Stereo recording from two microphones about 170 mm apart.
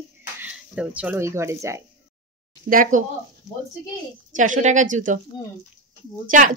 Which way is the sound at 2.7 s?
50° right (ahead or behind).